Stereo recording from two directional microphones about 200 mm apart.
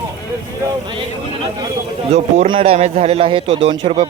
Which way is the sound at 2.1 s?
30° right (ahead or behind).